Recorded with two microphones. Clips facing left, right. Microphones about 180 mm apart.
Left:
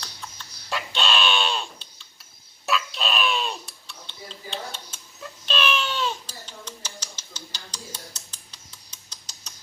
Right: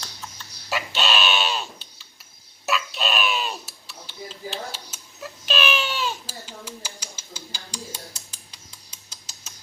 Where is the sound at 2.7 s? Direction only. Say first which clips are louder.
Right 1 dB; centre (ahead or behind).